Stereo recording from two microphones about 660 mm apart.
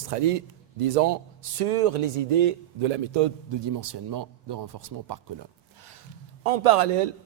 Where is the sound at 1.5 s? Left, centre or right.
Right.